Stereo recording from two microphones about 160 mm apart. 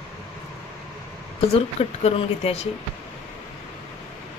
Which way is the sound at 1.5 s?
40° left (ahead or behind).